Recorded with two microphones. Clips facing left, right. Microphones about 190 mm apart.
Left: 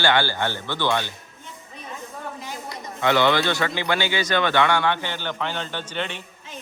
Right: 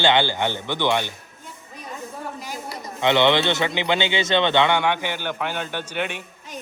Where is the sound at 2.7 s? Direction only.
20° right (ahead or behind).